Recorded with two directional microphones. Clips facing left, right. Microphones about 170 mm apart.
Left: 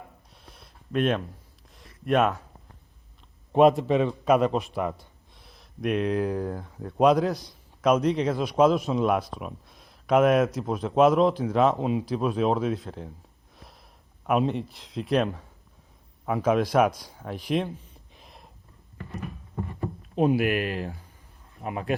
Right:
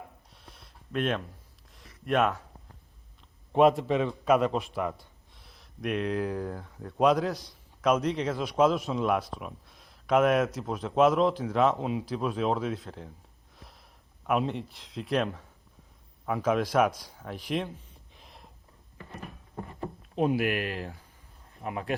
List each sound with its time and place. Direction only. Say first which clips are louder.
0.9 s a man's voice: left 5 dB; 20° left (ahead or behind)
3.5 s a man's voice: left 3 dB; 20° left (ahead or behind)
5.8 s a man's voice: left 4 dB; 20° left (ahead or behind)
8.6 s a man's voice: left 4 dB; 35° left (ahead or behind)
9.0 s a man's voice: left 3 dB; 25° left (ahead or behind)
14.3 s a man's voice: left 4 dB; 20° left (ahead or behind)
20.1 s a man's voice: left 4 dB; 15° left (ahead or behind)